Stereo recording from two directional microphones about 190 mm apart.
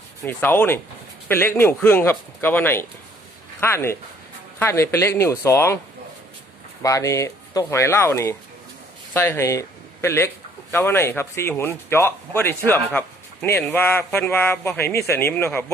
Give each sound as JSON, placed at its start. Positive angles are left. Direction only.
{"t": 0.2, "sound": "speech", "side_deg": 10}
{"t": 6.8, "sound": "speech", "side_deg": 15}